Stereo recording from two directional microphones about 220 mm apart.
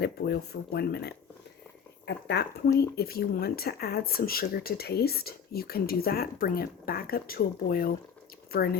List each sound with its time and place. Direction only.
0.0 s speech: 45° left (ahead or behind)